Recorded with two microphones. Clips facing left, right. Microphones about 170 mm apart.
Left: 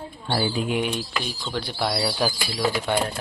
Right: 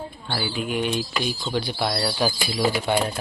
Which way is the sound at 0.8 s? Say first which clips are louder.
Right 1 dB; 5° left (ahead or behind).